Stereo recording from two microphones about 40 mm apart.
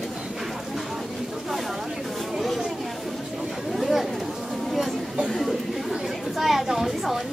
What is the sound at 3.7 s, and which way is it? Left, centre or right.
Chatter, centre.